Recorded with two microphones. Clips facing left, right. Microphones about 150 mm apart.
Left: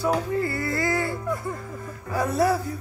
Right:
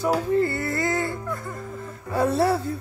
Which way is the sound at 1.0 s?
20° left (ahead or behind).